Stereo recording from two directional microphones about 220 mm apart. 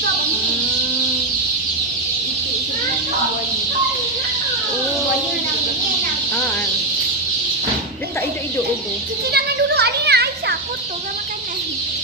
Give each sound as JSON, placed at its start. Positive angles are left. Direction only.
{"t": 9.3, "sound": "children playing", "side_deg": -50}